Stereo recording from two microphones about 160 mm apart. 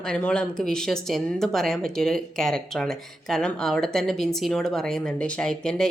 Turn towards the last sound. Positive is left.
turn(degrees=5)  # may be behind; listen again after turning